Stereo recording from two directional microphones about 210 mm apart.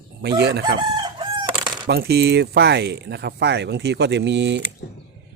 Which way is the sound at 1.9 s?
50° right (ahead or behind).